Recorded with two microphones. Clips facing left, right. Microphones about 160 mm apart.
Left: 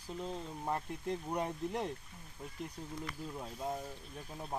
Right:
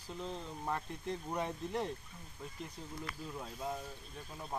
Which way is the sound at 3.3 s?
15° left (ahead or behind).